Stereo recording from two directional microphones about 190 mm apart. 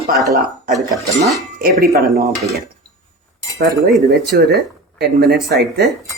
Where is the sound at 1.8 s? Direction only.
50° right (ahead or behind).